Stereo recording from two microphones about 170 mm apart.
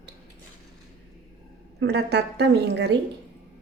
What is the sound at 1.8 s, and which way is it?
A woman's voice, 80° right.